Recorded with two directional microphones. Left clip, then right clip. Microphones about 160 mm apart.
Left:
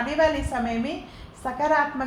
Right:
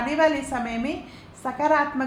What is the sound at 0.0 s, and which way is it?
A woman's voice, 50° right (ahead or behind).